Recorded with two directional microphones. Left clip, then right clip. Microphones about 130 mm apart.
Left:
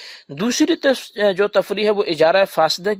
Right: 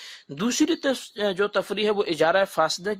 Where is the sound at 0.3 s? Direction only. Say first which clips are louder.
Left 5 dB; 35° left (ahead or behind).